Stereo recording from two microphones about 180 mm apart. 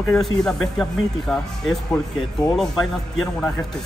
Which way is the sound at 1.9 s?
20° left (ahead or behind).